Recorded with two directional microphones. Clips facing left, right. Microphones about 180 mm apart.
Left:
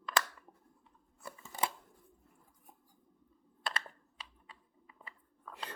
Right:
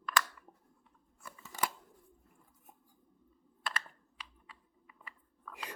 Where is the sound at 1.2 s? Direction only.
30° left (ahead or behind).